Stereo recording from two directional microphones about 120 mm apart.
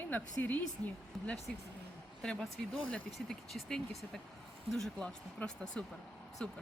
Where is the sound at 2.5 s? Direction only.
50° left (ahead or behind).